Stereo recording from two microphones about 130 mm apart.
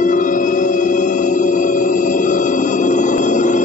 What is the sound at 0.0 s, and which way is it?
Music, 80° left.